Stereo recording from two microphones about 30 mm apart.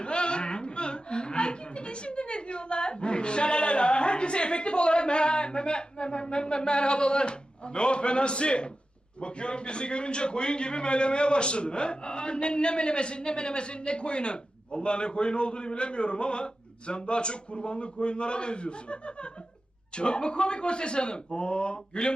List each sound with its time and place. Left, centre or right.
0.0 s chuckle: left
9.2 s a man's voice: left